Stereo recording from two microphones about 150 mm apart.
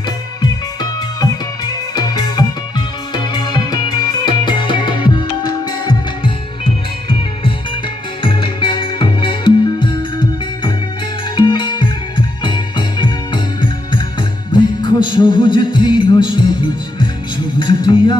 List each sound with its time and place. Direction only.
2.0 s music: 30° left (ahead or behind)
17.6 s music: 30° left (ahead or behind)